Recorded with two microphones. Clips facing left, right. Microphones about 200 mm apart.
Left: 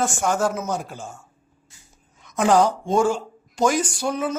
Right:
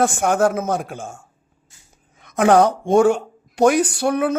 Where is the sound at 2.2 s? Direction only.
55° right (ahead or behind).